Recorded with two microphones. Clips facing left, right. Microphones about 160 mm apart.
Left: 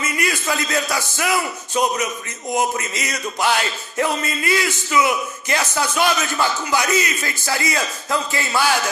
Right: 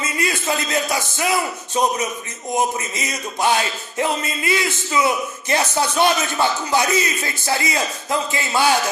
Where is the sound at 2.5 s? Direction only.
20° right (ahead or behind).